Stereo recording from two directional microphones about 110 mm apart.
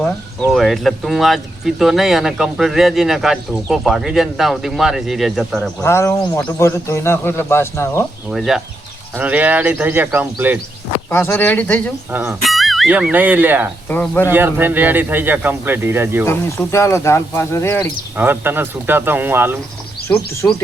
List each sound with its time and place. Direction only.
0.5 s speech: centre (ahead or behind)
5.8 s a man's voice: 25° left (ahead or behind)
8.3 s speech: 5° right (ahead or behind)
9.1 s speech: 15° right (ahead or behind)
11.1 s speech: 20° left (ahead or behind)
12.3 s music: centre (ahead or behind)
12.9 s speech: 15° right (ahead or behind)
13.8 s speech: 15° left (ahead or behind)
14.3 s speech: 20° right (ahead or behind)
16.2 s a man's voice: 20° left (ahead or behind)
18.2 s speech: 20° right (ahead or behind)
20.4 s a man's voice: 20° left (ahead or behind)